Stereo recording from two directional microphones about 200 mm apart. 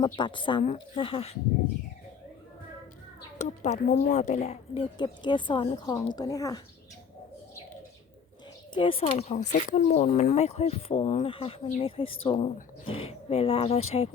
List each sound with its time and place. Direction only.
0.0 s speech: 25° left (ahead or behind)
3.4 s speech: 35° left (ahead or behind); by 6.6 s 15° left (ahead or behind)
8.7 s speech: 25° left (ahead or behind)